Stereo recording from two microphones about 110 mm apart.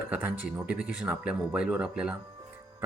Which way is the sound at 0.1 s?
15° right (ahead or behind).